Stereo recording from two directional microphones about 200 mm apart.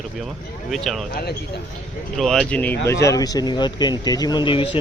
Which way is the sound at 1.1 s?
50° left (ahead or behind).